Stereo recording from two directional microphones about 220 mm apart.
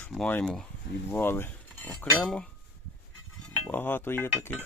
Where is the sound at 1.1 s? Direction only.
10° left (ahead or behind).